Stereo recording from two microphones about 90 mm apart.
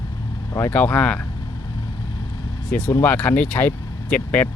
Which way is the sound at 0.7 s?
15° left (ahead or behind).